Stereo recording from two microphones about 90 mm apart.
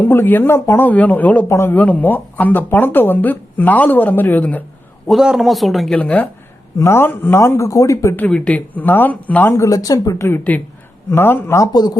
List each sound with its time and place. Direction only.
0.0 s speech: 20° left (ahead or behind)
5.0 s speech: 5° right (ahead or behind)
6.0 s speech: 15° left (ahead or behind)
6.7 s speech: 30° left (ahead or behind)
8.1 s speech: 15° left (ahead or behind)
9.5 s speech: 35° left (ahead or behind)
10.2 s speech: 20° left (ahead or behind)
11.7 s speech: 50° left (ahead or behind)